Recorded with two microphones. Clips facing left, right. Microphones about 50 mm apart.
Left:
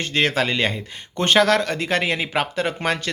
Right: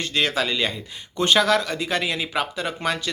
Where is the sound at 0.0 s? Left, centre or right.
Left.